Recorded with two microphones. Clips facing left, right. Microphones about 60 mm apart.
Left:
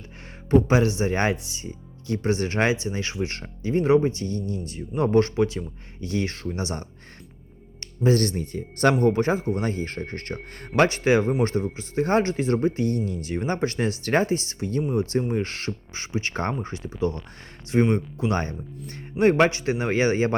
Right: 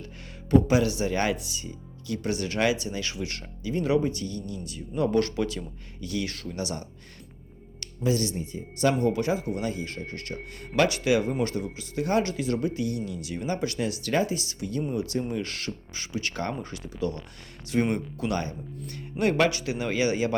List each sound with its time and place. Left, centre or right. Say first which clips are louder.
0.5 s speech: left 2 dB; left
8.0 s speech: left 5 dB; left